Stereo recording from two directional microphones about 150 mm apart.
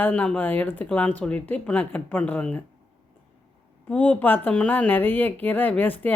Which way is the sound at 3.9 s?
10° left (ahead or behind).